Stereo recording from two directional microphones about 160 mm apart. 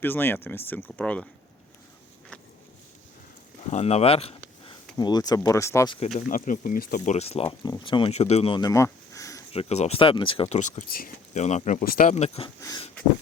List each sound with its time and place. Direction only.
0.0 s speech: 15° left (ahead or behind)
3.7 s speech: 40° left (ahead or behind)
4.9 s speech: 25° left (ahead or behind)
6.1 s speech: 55° left (ahead or behind)
7.1 s speech: 40° left (ahead or behind); by 9.4 s 20° left (ahead or behind)
9.5 s speech: 40° left (ahead or behind)
10.6 s speech: 50° left (ahead or behind)